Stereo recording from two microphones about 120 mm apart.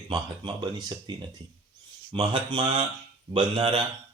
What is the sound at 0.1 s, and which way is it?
Speech, 40° right (ahead or behind).